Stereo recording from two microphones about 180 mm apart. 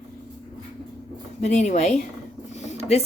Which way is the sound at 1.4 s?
40° left (ahead or behind).